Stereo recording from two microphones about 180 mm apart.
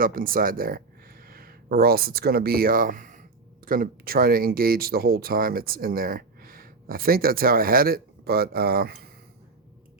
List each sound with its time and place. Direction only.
0.0 s speech: 50° right (ahead or behind)